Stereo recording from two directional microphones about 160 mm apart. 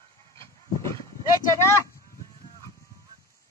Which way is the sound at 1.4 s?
15° left (ahead or behind).